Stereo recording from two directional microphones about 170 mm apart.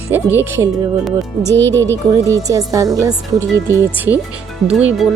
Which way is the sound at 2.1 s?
20° right (ahead or behind).